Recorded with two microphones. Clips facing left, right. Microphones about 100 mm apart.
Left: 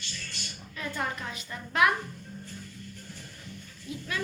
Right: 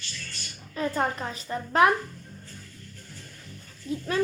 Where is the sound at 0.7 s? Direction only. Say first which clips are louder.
Right 7 dB; 35° right (ahead or behind).